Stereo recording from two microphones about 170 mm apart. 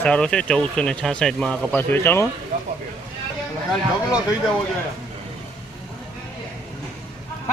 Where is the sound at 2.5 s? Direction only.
50° right (ahead or behind).